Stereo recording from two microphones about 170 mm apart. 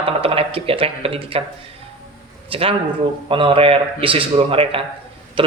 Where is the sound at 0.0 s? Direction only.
35° right (ahead or behind).